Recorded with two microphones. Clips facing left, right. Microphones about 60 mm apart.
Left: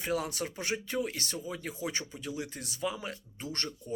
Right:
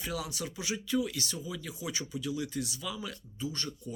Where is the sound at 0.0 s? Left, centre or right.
Left.